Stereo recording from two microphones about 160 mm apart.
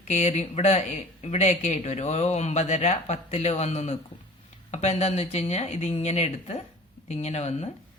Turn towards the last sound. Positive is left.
turn(degrees=40)  # may be behind; listen again after turning